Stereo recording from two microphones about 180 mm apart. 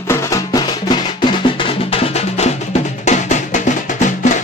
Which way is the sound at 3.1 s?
40° left (ahead or behind).